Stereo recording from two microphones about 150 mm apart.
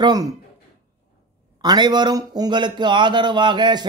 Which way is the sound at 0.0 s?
25° right (ahead or behind).